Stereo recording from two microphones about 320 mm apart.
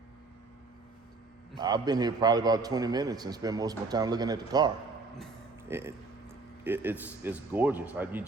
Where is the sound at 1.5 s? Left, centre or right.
Centre.